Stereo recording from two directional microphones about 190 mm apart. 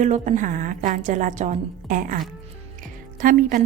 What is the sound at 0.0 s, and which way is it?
A woman's voice, 40° right (ahead or behind).